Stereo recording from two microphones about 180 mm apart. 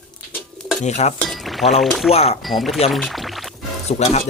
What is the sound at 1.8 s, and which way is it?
Speech, centre (ahead or behind).